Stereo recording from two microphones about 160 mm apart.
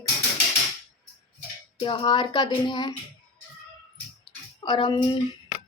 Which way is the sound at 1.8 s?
30° left (ahead or behind).